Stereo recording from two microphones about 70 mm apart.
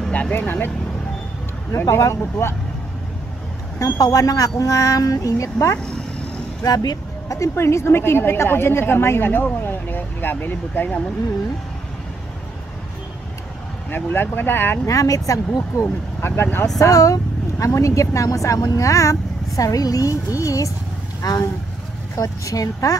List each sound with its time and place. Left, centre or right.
0.1 s speech: left
1.9 s speech: left
3.8 s speech: left
6.6 s speech: left
13.8 s speech: left
14.9 s speech: left
15.8 s speech: left
16.7 s speech: left
21.2 s speech: left
22.1 s speech: left